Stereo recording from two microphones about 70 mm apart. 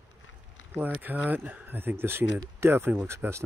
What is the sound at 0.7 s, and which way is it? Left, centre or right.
Speech, right.